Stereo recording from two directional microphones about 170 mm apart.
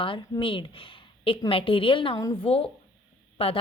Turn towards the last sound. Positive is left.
turn(degrees=35)  # may be behind; listen again after turning